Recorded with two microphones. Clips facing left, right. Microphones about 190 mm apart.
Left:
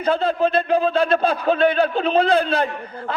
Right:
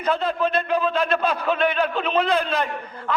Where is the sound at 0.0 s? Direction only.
30° left (ahead or behind).